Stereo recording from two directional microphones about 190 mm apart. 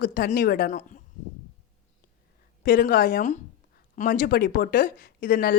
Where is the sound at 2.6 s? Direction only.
50° left (ahead or behind).